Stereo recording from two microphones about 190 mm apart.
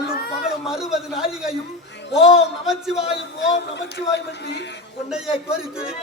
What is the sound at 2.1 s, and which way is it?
Speech, 30° left (ahead or behind).